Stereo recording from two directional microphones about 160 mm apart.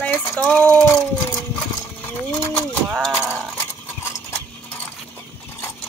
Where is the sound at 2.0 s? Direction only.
10° left (ahead or behind).